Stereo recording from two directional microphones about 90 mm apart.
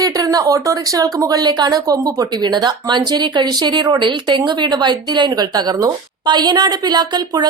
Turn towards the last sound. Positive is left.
turn(degrees=-50)  # may be behind; listen again after turning